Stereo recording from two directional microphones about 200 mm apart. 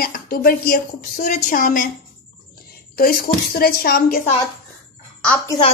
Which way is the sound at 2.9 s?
50° left (ahead or behind).